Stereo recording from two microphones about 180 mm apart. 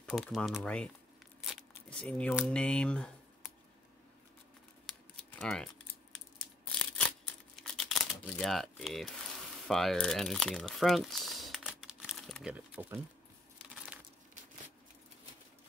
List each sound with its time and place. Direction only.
0.0 s speech: centre (ahead or behind)
1.4 s tearing: centre (ahead or behind)
2.3 s speech: 5° left (ahead or behind)
4.9 s a sound: centre (ahead or behind)
5.4 s speech: 5° left (ahead or behind)
7.5 s crumpling: centre (ahead or behind)
9.6 s speech: centre (ahead or behind)